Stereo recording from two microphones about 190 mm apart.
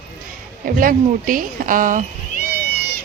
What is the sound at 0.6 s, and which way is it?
Speech, 45° right (ahead or behind).